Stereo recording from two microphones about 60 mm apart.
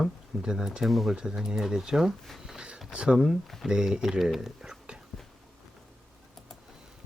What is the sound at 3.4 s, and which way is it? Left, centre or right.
Speech, centre.